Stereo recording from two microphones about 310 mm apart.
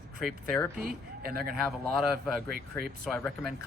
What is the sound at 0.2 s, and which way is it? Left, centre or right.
Speech, centre.